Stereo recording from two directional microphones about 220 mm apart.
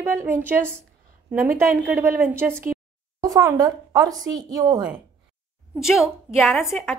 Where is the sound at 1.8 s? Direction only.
10° right (ahead or behind).